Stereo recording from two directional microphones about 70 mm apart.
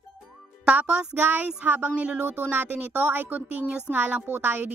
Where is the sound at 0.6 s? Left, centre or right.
Centre.